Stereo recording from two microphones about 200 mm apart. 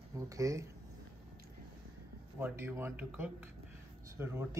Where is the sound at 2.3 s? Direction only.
10° right (ahead or behind).